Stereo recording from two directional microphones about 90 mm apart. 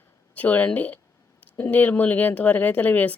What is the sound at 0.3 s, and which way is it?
Speech, 20° left (ahead or behind).